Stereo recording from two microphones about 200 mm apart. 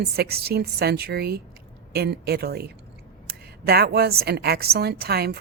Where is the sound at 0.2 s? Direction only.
50° right (ahead or behind).